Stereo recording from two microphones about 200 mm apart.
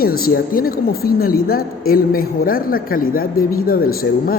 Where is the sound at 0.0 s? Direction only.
45° left (ahead or behind).